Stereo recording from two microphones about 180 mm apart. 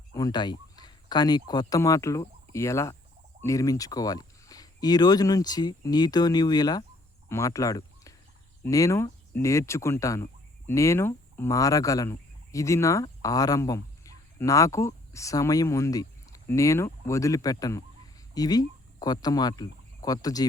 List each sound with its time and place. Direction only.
0.1 s speech: 20° left (ahead or behind)